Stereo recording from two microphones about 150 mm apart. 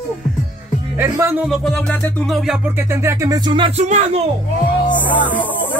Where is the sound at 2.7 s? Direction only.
15° right (ahead or behind).